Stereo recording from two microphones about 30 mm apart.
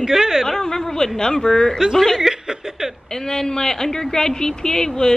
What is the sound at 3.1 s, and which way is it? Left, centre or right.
A woman's voice, centre.